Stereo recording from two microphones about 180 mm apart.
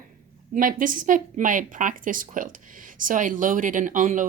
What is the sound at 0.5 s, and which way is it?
A woman's voice, 50° right (ahead or behind).